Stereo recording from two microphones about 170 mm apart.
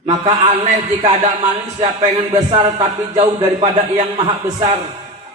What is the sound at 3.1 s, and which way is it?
A man's voice, 40° right (ahead or behind).